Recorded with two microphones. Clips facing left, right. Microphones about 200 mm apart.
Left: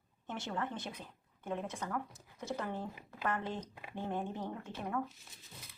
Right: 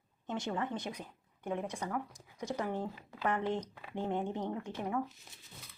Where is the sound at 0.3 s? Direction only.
15° right (ahead or behind).